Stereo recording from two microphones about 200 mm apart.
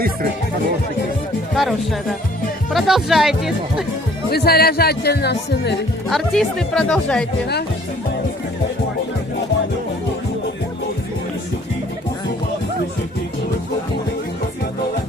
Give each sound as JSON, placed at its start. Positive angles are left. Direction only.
{"t": 1.5, "sound": "speech", "side_deg": 0}
{"t": 4.3, "sound": "speech", "side_deg": 50}
{"t": 6.1, "sound": "speech", "side_deg": 0}